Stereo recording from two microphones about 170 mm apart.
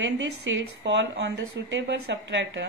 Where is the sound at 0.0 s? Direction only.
90° right.